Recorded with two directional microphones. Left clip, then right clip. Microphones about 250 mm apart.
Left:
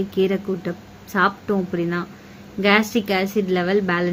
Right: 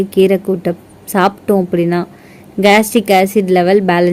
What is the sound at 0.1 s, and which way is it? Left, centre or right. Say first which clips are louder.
A woman's voice: right 10 dB; right.